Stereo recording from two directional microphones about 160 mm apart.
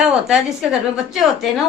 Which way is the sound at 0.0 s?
5° right (ahead or behind).